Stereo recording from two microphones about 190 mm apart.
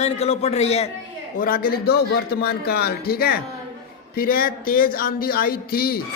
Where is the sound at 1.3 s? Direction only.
50° left (ahead or behind).